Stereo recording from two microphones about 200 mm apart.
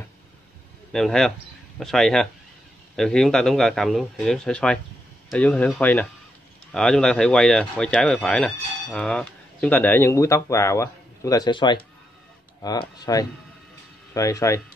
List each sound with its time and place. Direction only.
0.9 s speech: centre (ahead or behind)